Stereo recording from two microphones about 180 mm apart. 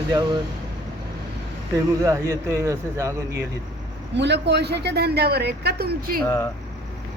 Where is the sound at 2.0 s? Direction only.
15° right (ahead or behind).